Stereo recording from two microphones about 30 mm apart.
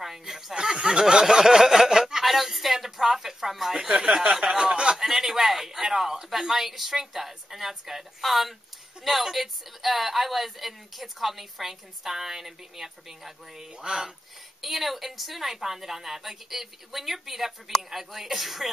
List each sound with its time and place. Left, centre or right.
0.0 s speech: centre
0.6 s speech: right
2.2 s speech: centre
3.7 s speech: right
4.9 s a man's voice: centre
14.6 s a woman's voice: centre